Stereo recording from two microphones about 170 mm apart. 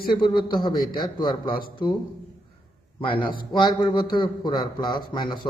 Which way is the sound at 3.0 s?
30° left (ahead or behind).